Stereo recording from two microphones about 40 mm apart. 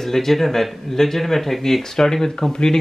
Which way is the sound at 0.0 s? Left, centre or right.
Centre.